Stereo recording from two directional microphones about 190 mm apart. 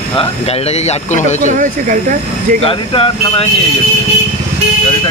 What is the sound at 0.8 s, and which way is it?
Speech, 40° left (ahead or behind).